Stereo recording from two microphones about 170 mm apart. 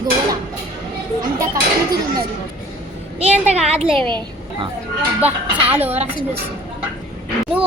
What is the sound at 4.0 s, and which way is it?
Speech, 25° right (ahead or behind).